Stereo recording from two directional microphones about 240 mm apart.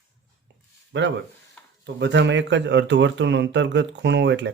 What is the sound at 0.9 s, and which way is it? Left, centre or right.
Speech, right.